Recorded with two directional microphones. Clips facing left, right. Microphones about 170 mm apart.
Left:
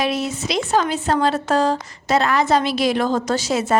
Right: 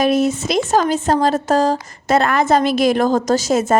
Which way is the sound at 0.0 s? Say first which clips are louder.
Right 6 dB; 50° right (ahead or behind).